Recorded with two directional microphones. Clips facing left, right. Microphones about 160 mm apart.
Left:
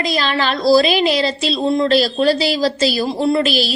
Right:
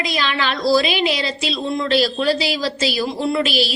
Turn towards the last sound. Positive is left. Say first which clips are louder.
# left 3 dB
turn(degrees=40)  # may be behind; listen again after turning